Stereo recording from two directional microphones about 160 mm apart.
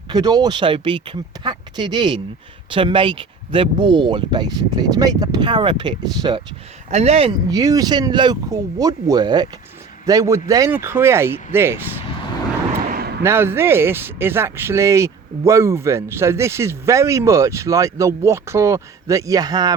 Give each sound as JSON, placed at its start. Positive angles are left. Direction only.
{"t": 0.1, "sound": "speech", "side_deg": -25}
{"t": 6.9, "sound": "speech", "side_deg": -40}
{"t": 7.5, "sound": "speech", "side_deg": -20}
{"t": 12.9, "sound": "a sound", "side_deg": -70}
{"t": 13.2, "sound": "speech", "side_deg": -15}